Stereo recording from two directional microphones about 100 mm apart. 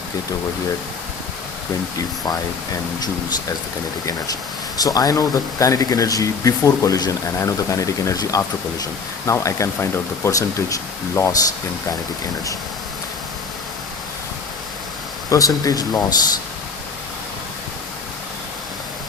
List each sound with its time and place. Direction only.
4.8 s speech: 40° left (ahead or behind)
15.3 s speech: 35° left (ahead or behind)